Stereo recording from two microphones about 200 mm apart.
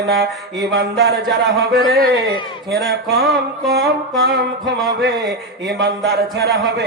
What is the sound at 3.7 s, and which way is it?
A man's voice, 55° right (ahead or behind).